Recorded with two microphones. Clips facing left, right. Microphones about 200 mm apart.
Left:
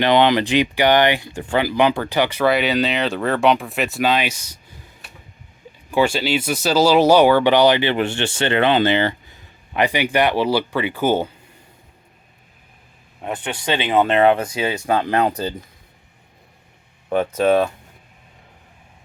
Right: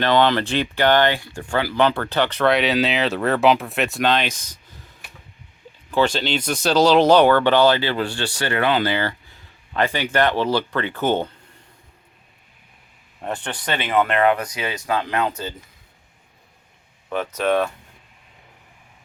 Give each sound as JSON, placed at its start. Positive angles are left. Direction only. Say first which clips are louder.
{"t": 0.0, "sound": "speech", "louder": "left 2 dB", "side_deg": 15}
{"t": 5.9, "sound": "speech", "louder": "left 2 dB", "side_deg": 10}
{"t": 13.2, "sound": "speech", "louder": "left 3 dB", "side_deg": 5}
{"t": 17.1, "sound": "speech", "louder": "left 5 dB", "side_deg": 30}